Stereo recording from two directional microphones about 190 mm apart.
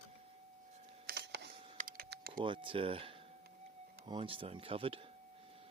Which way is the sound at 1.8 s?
50° right (ahead or behind).